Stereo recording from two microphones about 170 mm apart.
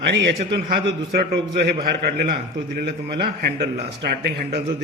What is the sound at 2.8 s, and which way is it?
A man's voice, 65° right (ahead or behind).